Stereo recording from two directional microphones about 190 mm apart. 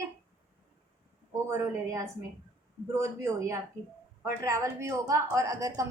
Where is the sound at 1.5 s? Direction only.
15° right (ahead or behind).